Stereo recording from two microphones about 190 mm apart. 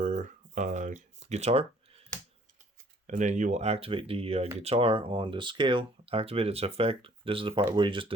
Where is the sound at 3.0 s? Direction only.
40° right (ahead or behind).